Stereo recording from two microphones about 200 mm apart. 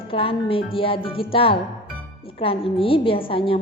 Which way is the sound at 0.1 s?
25° left (ahead or behind).